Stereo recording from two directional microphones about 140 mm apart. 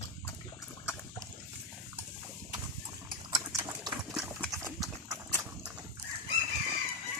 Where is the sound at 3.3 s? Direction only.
25° right (ahead or behind).